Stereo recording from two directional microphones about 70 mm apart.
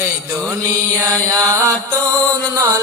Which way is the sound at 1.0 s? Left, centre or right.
Right.